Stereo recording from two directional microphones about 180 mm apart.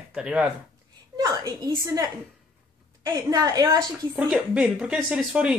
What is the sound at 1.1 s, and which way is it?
A woman's voice, 20° right (ahead or behind).